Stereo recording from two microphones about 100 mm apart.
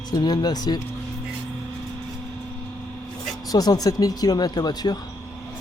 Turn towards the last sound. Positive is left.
turn(degrees=45)  # may be behind; listen again after turning